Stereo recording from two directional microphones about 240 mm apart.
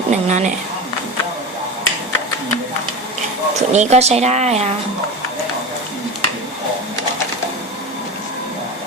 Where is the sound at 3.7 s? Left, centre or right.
Right.